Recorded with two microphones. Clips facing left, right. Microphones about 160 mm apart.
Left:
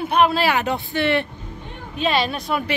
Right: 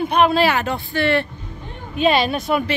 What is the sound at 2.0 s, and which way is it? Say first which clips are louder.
Speech: right 4 dB; 5° right (ahead or behind).